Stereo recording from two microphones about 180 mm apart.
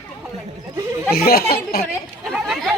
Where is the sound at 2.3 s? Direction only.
Centre (ahead or behind).